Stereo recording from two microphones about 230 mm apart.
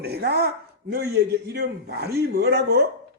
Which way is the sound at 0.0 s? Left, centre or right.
Right.